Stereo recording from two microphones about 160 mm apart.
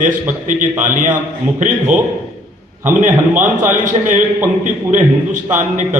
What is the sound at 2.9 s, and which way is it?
A man's voice, 50° right (ahead or behind).